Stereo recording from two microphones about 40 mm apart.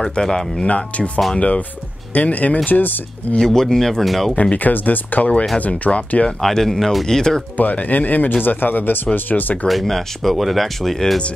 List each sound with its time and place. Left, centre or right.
0.0 s speech: centre
0.7 s speech: left
3.3 s speech: centre
4.4 s speech: left
5.7 s speech: left
6.4 s speech: centre
7.1 s speech: centre
7.5 s speech: left
9.3 s speech: left
9.7 s speech: centre